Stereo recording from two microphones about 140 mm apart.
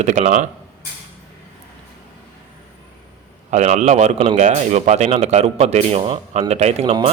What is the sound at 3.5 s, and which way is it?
Speech, 55° right (ahead or behind).